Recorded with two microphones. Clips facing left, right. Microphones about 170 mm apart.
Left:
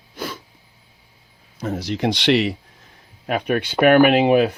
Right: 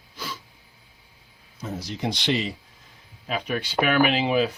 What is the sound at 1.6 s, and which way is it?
Speech, 75° left (ahead or behind).